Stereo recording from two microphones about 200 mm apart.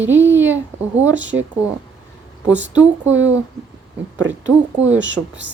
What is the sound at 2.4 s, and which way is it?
Speech, 5° right (ahead or behind).